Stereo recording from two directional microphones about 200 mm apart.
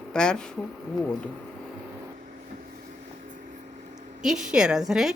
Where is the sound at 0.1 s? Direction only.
5° left (ahead or behind).